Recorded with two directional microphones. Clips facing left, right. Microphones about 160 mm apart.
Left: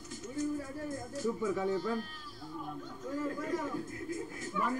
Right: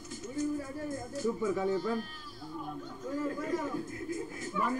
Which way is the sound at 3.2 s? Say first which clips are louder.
Right 2 dB; 15° right (ahead or behind).